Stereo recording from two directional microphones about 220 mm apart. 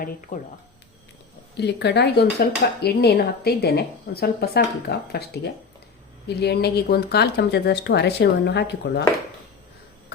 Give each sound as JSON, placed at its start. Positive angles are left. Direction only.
{"t": 1.5, "sound": "speech", "side_deg": 50}